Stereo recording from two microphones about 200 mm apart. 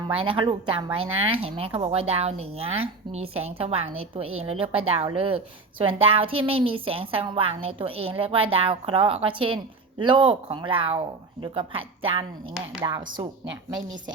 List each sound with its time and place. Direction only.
0.1 s a woman's voice: 25° right (ahead or behind)